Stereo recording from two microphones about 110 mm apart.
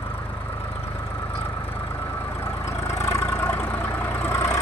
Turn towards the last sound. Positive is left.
turn(degrees=20)  # may be behind; listen again after turning